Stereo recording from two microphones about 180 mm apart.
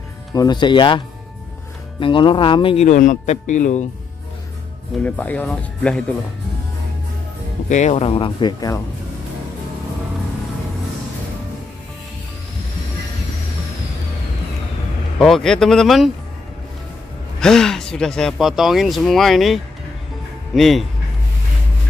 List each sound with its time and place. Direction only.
0.3 s speech: 20° left (ahead or behind); by 3.8 s 45° left (ahead or behind)
5.0 s speech: 10° left (ahead or behind)
7.7 s speech: 40° left (ahead or behind); by 8.8 s 20° left (ahead or behind)
15.1 s speech: centre (ahead or behind)
17.4 s speech: 5° left (ahead or behind)